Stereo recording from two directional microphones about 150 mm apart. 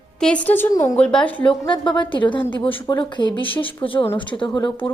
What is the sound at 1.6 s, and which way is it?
A woman's voice, 30° left (ahead or behind).